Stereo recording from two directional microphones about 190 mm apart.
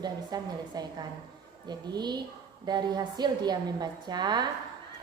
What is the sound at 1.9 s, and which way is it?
A woman's voice, 20° right (ahead or behind).